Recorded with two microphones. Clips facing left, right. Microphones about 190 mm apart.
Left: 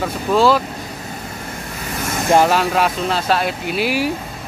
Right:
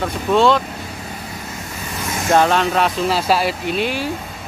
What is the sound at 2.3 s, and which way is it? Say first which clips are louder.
Speech: left 1 dB; 5° left (ahead or behind).